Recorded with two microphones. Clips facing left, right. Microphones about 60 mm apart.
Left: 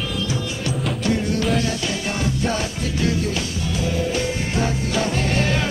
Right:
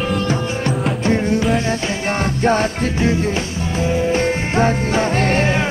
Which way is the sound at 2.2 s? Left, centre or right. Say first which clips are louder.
Right 8 dB; right.